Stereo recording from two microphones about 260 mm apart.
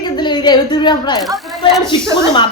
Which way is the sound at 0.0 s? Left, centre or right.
Centre.